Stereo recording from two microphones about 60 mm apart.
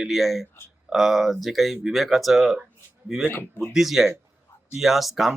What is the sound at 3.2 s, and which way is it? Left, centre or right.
Speech, left.